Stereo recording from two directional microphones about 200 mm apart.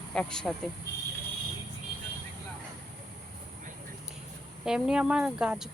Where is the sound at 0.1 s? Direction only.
5° left (ahead or behind).